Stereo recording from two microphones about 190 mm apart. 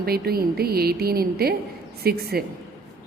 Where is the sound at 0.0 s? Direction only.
55° right (ahead or behind).